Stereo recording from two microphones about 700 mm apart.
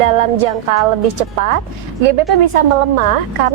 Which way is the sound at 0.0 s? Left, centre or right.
Right.